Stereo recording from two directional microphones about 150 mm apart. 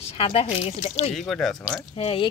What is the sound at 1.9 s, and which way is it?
Speech, 40° left (ahead or behind).